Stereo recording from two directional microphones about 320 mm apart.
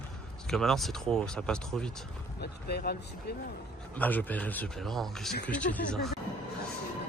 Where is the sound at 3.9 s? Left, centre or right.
Centre.